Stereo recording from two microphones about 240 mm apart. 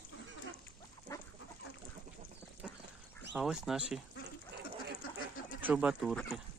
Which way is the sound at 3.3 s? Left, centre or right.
Centre.